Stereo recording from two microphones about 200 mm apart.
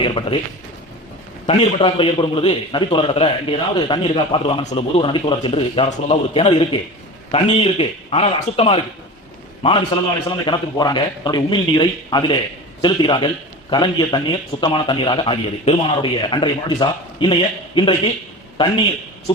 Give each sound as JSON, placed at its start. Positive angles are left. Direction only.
{"t": 0.0, "sound": "a man's voice", "side_deg": 25}
{"t": 1.5, "sound": "a man's voice", "side_deg": 25}